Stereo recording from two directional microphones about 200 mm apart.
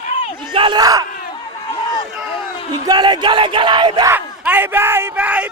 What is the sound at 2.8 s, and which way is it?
Speech, 20° right (ahead or behind).